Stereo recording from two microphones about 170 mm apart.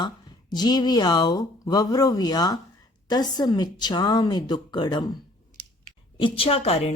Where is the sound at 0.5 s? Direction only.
25° left (ahead or behind).